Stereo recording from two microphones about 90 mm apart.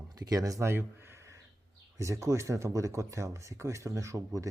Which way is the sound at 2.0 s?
35° right (ahead or behind).